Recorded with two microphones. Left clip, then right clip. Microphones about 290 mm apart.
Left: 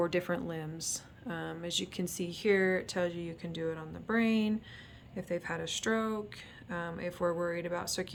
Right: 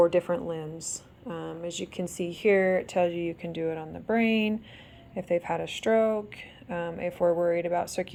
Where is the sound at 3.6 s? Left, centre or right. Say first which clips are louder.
Right 6 dB; centre.